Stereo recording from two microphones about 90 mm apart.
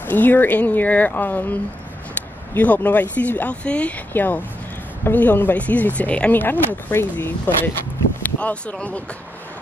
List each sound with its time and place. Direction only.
0.0 s speech: 20° left (ahead or behind)